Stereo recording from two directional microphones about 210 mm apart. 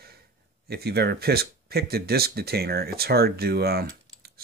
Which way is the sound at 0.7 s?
50° right (ahead or behind).